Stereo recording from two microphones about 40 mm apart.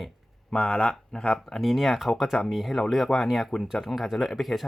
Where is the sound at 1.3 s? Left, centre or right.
Centre.